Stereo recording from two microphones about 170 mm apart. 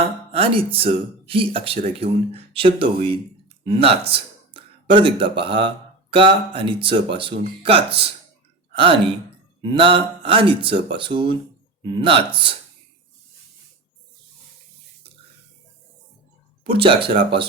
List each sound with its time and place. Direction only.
0.3 s speech: 35° right (ahead or behind)
16.6 s speech: 30° right (ahead or behind)